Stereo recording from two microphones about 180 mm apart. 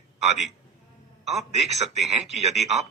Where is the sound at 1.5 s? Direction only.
40° right (ahead or behind).